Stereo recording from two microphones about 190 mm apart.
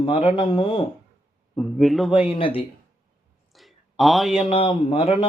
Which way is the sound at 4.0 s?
Centre (ahead or behind).